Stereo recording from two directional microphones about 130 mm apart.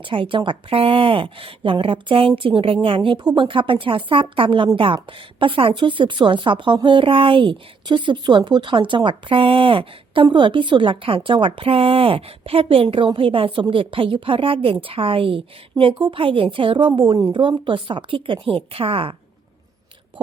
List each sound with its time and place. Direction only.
0.0 s a woman's voice: 40° right (ahead or behind)
20.2 s a woman's voice: 40° right (ahead or behind)